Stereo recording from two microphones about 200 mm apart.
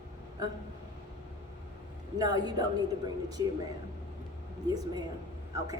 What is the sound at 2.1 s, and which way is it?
A woman's voice, 20° right (ahead or behind).